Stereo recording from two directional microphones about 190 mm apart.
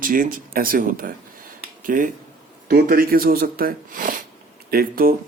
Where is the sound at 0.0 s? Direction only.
45° right (ahead or behind).